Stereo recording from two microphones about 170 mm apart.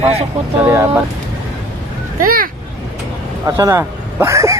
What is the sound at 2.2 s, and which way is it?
Speech, 55° right (ahead or behind).